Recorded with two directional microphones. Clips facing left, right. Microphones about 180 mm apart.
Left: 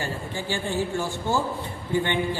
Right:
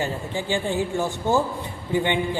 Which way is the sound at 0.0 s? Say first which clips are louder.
Right 4 dB; 15° right (ahead or behind).